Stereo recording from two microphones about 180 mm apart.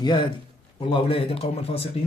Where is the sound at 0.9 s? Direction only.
30° left (ahead or behind).